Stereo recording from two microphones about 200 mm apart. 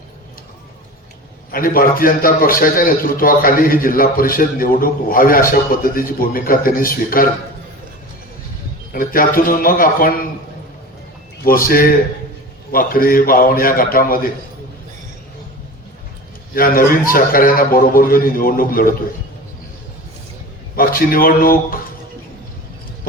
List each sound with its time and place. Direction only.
1.5 s a man's voice: 45° left (ahead or behind)
8.9 s a man's voice: 45° left (ahead or behind)
11.4 s a man's voice: 45° left (ahead or behind)
16.6 s a man's voice: 45° left (ahead or behind)
20.7 s speech: 45° left (ahead or behind)